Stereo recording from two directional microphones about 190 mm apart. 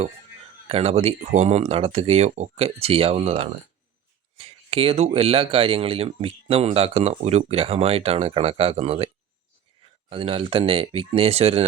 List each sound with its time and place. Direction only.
0.7 s speech: 30° right (ahead or behind)